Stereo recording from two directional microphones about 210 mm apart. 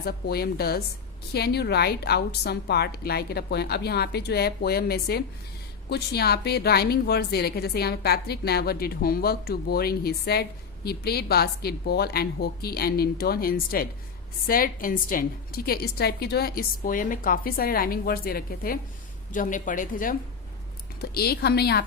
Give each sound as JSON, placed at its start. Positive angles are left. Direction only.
{"t": 0.0, "sound": "a woman's voice", "side_deg": 50}